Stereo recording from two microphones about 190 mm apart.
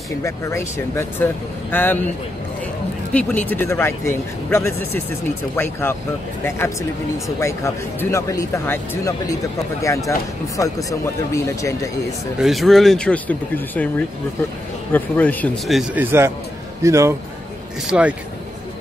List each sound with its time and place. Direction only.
0.2 s speech: 15° left (ahead or behind)
3.1 s speech: 10° left (ahead or behind)
7.2 s speech: 15° left (ahead or behind)
12.4 s speech: centre (ahead or behind)
16.0 s a man's voice: 10° right (ahead or behind)
17.8 s speech: 5° right (ahead or behind)